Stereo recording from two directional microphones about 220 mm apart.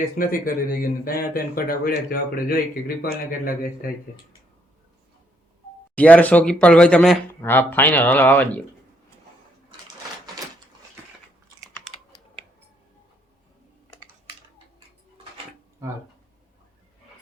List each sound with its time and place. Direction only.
0.0 s speech: 40° left (ahead or behind)
5.9 s speech: 5° left (ahead or behind)